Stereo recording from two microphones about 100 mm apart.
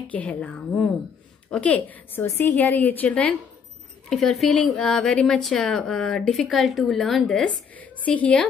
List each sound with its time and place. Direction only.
0.1 s a woman's voice: 15° left (ahead or behind)